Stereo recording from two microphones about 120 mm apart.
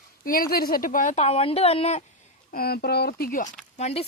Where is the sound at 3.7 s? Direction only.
60° left (ahead or behind).